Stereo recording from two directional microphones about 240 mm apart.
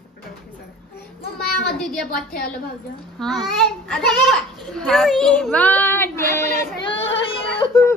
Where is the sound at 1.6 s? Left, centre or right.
Centre.